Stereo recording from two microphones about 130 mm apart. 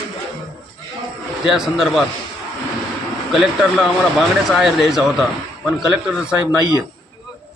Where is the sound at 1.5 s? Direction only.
Centre (ahead or behind).